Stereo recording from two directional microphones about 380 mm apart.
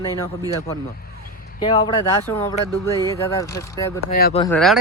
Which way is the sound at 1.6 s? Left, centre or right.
Centre.